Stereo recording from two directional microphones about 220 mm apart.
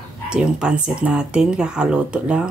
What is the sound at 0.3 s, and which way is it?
Speech, 5° right (ahead or behind).